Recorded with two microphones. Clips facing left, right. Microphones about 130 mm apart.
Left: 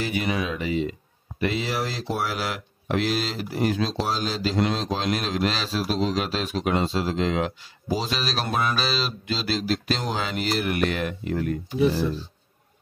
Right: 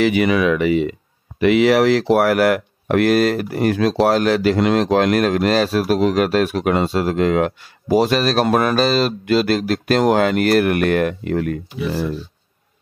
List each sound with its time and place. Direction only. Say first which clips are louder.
0.0 s speech: right 11 dB; 80° right